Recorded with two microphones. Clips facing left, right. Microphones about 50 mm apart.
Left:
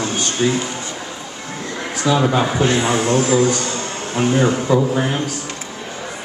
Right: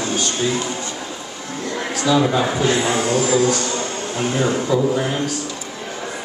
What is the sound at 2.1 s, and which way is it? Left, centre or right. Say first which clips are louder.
Speech: left 1 dB; left.